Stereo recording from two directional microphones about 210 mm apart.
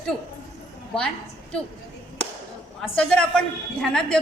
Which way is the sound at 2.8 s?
5° left (ahead or behind).